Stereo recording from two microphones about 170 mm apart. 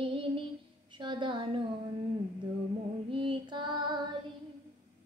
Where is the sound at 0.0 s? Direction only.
30° right (ahead or behind).